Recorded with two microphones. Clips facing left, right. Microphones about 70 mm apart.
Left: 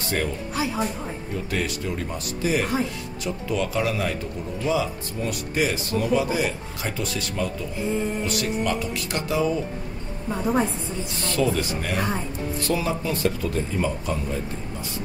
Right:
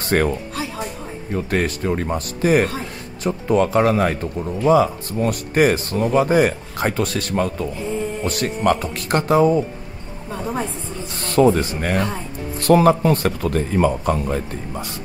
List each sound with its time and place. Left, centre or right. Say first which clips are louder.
0.1 s speech: right 8 dB; right
1.3 s speech: right 7 dB; right
10.3 s a woman's voice: left 2 dB; centre
11.1 s speech: right 9 dB; right
12.6 s speech: right 13 dB; right